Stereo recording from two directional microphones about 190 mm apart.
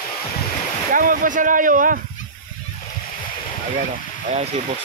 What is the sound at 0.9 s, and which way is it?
Speech, 45° right (ahead or behind).